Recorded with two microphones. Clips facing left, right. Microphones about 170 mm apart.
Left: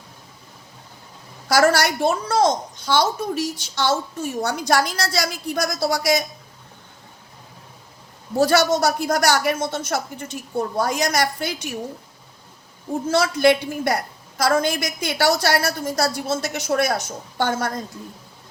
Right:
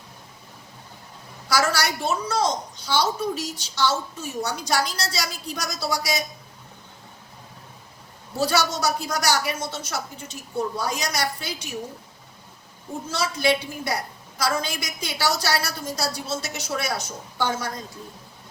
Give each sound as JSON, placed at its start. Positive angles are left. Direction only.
{"t": 1.5, "sound": "a woman's voice", "side_deg": 55}
{"t": 8.4, "sound": "a woman's voice", "side_deg": 50}
{"t": 13.1, "sound": "a woman's voice", "side_deg": 55}